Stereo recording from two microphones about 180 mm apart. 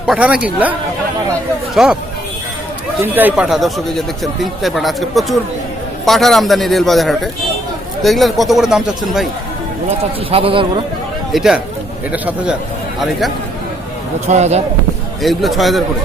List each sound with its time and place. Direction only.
0.0 s speech: 5° right (ahead or behind)
1.7 s speech: 5° right (ahead or behind)
3.2 s speech: 10° right (ahead or behind)
10.0 s a man's voice: 30° right (ahead or behind)
11.3 s a man's voice: centre (ahead or behind)
14.3 s a man's voice: 40° right (ahead or behind)
15.2 s speech: centre (ahead or behind)